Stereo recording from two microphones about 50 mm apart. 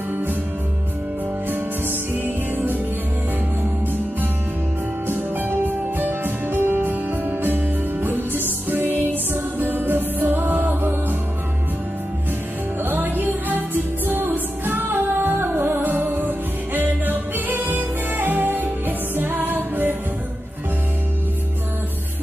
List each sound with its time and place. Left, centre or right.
1.5 s music: right
5.0 s music: right
12.8 s music: right